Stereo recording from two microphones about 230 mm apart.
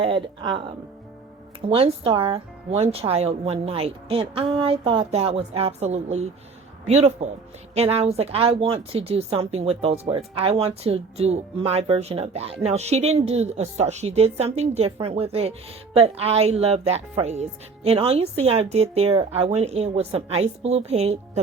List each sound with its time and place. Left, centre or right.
0.0 s speech: right
1.7 s speech: right